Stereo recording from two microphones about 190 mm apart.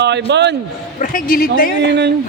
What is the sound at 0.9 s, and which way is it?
Speech, 45° left (ahead or behind).